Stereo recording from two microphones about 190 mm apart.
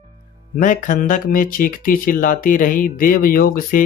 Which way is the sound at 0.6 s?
45° left (ahead or behind).